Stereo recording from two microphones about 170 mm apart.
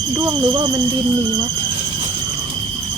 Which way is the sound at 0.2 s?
20° right (ahead or behind).